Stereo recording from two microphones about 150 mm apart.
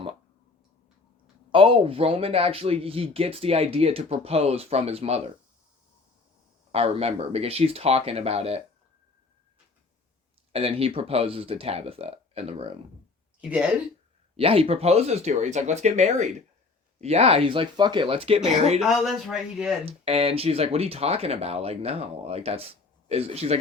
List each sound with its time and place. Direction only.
1.5 s speech: 35° right (ahead or behind)
6.7 s speech: 45° right (ahead or behind)
10.5 s speech: 40° right (ahead or behind)
14.3 s speech: 40° right (ahead or behind)
18.9 s speech: centre (ahead or behind)
19.8 s speech: 40° right (ahead or behind)